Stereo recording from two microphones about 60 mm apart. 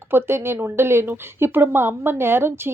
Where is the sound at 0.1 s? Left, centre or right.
Right.